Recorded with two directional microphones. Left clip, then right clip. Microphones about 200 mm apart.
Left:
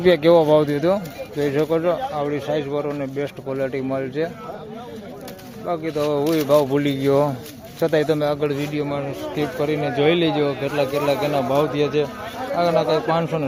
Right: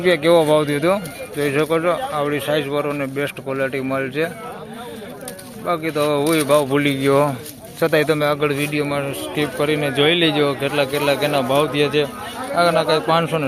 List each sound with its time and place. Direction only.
0.0 s speech: 20° left (ahead or behind); by 4.3 s centre (ahead or behind)
5.6 s speech: centre (ahead or behind)